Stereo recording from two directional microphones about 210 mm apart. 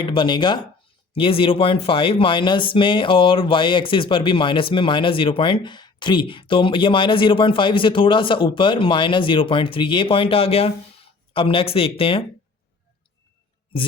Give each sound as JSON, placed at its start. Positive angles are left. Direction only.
{"t": 0.0, "sound": "speech", "side_deg": 25}